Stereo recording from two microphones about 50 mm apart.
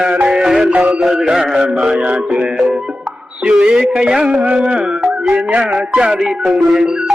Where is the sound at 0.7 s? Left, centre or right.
Right.